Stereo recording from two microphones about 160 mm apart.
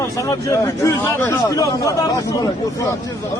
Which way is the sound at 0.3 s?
20° left (ahead or behind).